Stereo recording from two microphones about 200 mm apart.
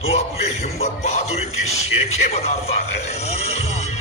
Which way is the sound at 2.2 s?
30° left (ahead or behind).